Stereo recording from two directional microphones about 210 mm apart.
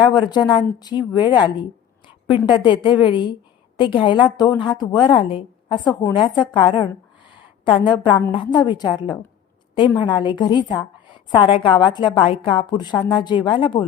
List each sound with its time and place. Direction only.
0.0 s a woman's voice: 20° left (ahead or behind)
2.6 s a woman's voice: 20° left (ahead or behind)
5.9 s speech: 10° left (ahead or behind)
6.1 s a woman's voice: 20° left (ahead or behind)